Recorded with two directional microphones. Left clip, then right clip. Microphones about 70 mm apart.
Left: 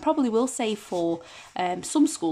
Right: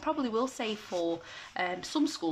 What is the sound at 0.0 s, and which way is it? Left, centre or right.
Speech, left.